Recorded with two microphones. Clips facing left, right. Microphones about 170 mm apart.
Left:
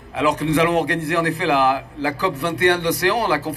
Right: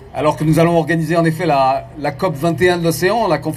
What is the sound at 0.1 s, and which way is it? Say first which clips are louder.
A man's voice: right 5 dB; 40° right (ahead or behind).